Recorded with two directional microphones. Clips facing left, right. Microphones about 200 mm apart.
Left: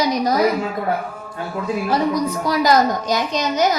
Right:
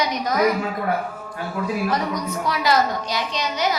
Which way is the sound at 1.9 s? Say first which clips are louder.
Left 5 dB; 30° left (ahead or behind).